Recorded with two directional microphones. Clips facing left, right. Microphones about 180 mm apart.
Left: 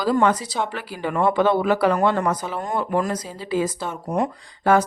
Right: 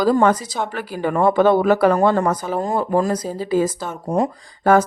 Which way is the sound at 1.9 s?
35° right (ahead or behind).